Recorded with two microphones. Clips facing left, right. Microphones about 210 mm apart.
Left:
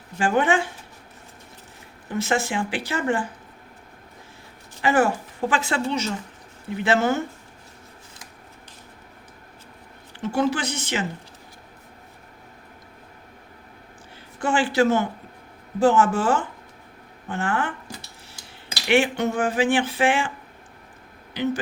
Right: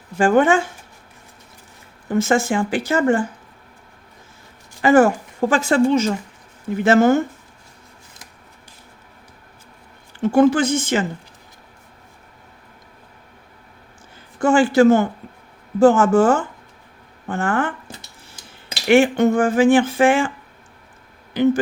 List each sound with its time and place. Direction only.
0.2 s speech: 45° right (ahead or behind)
2.0 s speech: 45° right (ahead or behind)
4.8 s speech: 45° right (ahead or behind)
10.3 s speech: 50° right (ahead or behind)
14.4 s speech: 45° right (ahead or behind)
18.9 s speech: 45° right (ahead or behind)
21.4 s speech: 50° right (ahead or behind)